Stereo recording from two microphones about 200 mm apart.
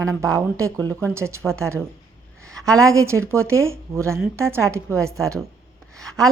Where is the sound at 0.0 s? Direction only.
15° right (ahead or behind).